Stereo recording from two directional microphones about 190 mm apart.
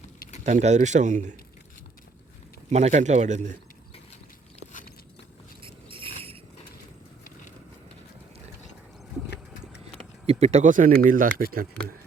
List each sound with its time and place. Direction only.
0.2 s vehicle: 35° left (ahead or behind)
0.4 s speech: 35° right (ahead or behind)
2.6 s speech: 35° right (ahead or behind)
5.6 s a sound: 30° right (ahead or behind)
10.2 s speech: 35° right (ahead or behind)